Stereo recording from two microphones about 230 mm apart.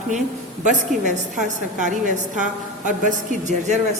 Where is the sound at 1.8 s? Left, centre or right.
Right.